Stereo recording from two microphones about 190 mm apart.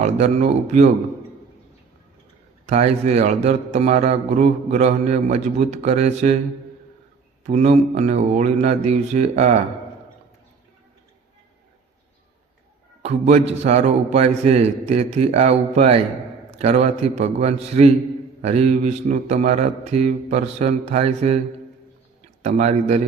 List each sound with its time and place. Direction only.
0.0 s a man's voice: 40° right (ahead or behind)
2.6 s a man's voice: 35° right (ahead or behind)
7.4 s a man's voice: 35° right (ahead or behind)
13.0 s a man's voice: 35° right (ahead or behind)
22.4 s a man's voice: 40° right (ahead or behind)